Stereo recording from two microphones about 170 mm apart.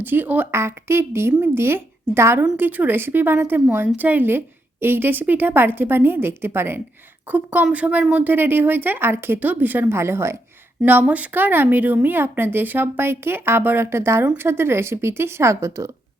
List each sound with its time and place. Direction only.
0.0 s speech: 10° right (ahead or behind)